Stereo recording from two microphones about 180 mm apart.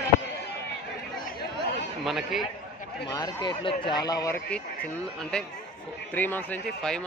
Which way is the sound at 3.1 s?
25° left (ahead or behind).